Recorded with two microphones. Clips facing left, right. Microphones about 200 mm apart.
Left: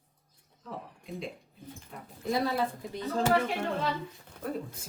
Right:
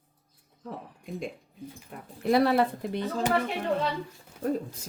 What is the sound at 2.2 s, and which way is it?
Speech, 70° right (ahead or behind).